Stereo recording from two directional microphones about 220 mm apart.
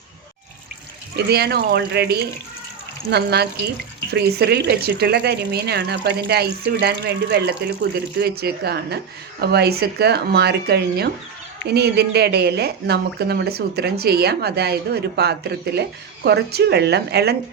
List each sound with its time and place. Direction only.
1.3 s speech: 45° right (ahead or behind)